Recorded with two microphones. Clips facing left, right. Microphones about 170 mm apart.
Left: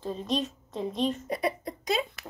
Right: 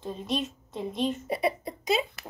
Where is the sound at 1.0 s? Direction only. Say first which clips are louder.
Right 2 dB; 5° right (ahead or behind).